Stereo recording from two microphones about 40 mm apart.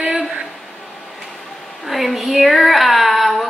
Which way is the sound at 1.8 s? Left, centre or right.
Centre.